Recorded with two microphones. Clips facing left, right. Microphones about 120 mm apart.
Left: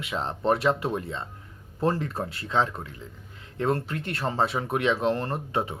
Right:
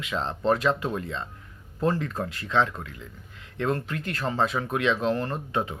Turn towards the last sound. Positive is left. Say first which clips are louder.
# even
turn(degrees=30)  # may be behind; listen again after turning